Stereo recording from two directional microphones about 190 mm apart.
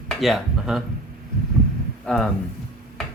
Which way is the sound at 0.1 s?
Centre (ahead or behind).